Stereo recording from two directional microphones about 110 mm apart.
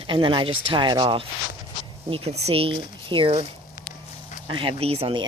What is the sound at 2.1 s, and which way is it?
Speech, 60° right (ahead or behind).